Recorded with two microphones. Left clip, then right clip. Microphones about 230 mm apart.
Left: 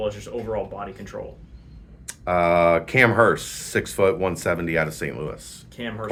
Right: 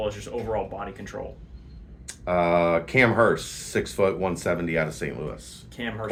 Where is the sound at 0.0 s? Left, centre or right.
Centre.